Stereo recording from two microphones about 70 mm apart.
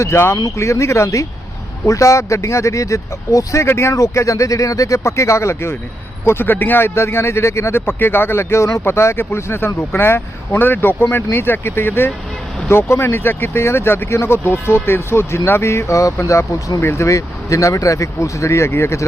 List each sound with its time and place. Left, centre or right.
0.0 s speech: left